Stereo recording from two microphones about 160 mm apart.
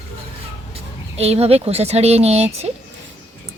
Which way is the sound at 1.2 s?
40° right (ahead or behind).